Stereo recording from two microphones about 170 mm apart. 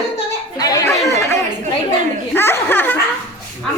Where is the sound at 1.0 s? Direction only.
15° left (ahead or behind).